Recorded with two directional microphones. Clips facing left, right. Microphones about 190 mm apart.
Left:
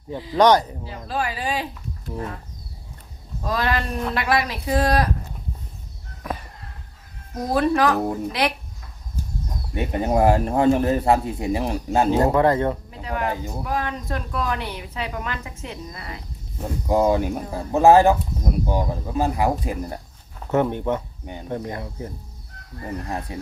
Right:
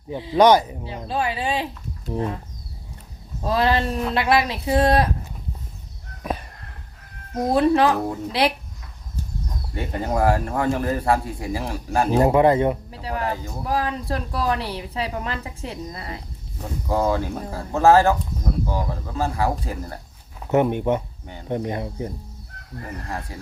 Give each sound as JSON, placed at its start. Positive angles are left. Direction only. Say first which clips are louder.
{"t": 0.3, "sound": "speech", "louder": "right 1 dB", "side_deg": -10}
{"t": 0.9, "sound": "a woman's voice", "louder": "right 2 dB", "side_deg": -25}
{"t": 3.4, "sound": "a woman's voice", "louder": "right 4 dB", "side_deg": -30}
{"t": 7.5, "sound": "a woman's voice", "louder": "right 1 dB", "side_deg": -25}
{"t": 9.7, "sound": "speech", "louder": "left 3 dB", "side_deg": 20}
{"t": 12.1, "sound": "speech", "louder": "right 4 dB", "side_deg": -15}
{"t": 12.9, "sound": "a sound", "louder": "even", "side_deg": -35}
{"t": 13.2, "sound": "speech", "louder": "left 3 dB", "side_deg": 15}
{"t": 13.7, "sound": "a woman's voice", "louder": "right 3 dB", "side_deg": -30}
{"t": 16.9, "sound": "speech", "louder": "left 3 dB", "side_deg": 15}
{"t": 20.5, "sound": "a woman's voice", "louder": "right 2 dB", "side_deg": -15}
{"t": 23.0, "sound": "speech", "louder": "left 2 dB", "side_deg": 20}